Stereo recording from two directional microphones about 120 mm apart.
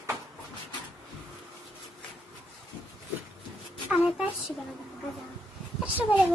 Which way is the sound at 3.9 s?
10° right (ahead or behind).